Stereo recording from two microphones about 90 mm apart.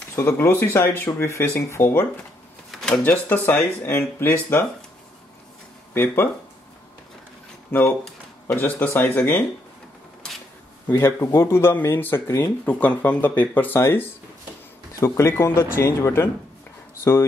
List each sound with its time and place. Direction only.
0.1 s speech: 30° left (ahead or behind)
2.7 s drawer open or close: 5° left (ahead or behind)
3.0 s speech: 20° left (ahead or behind)
7.7 s speech: 25° left (ahead or behind)
10.9 s speech: 30° left (ahead or behind)